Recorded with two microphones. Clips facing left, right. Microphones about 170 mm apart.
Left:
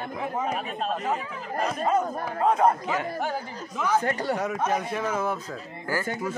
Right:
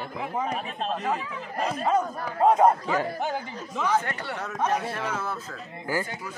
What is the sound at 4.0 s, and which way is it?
Speech, 40° left (ahead or behind).